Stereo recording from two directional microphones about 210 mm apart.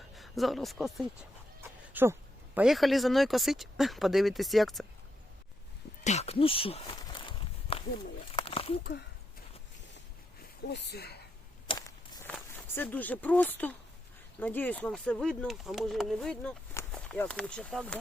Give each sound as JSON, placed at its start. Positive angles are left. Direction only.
{"t": 0.2, "sound": "speech", "side_deg": 0}
{"t": 1.9, "sound": "a sound", "side_deg": -10}
{"t": 2.6, "sound": "speech", "side_deg": 0}
{"t": 6.1, "sound": "a sound", "side_deg": 30}
{"t": 10.7, "sound": "speech", "side_deg": 50}
{"t": 11.7, "sound": "walk", "side_deg": 25}
{"t": 12.2, "sound": "speech", "side_deg": 10}